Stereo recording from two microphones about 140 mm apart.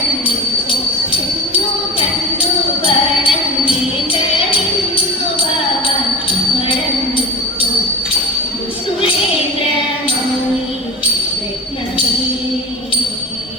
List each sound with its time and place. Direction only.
2.4 s music: 40° left (ahead or behind)
5.8 s music: 40° left (ahead or behind)